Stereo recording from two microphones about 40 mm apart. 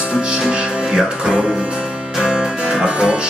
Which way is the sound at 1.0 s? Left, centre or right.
Right.